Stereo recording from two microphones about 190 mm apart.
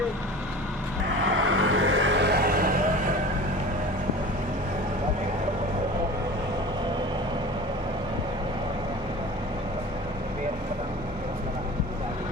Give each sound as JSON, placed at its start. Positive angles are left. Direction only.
{"t": 1.5, "sound": "vehicle", "side_deg": -90}